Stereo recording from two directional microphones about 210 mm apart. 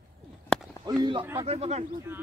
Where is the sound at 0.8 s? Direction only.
20° right (ahead or behind).